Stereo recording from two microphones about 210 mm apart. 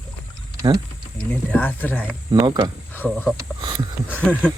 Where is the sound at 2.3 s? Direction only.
20° right (ahead or behind).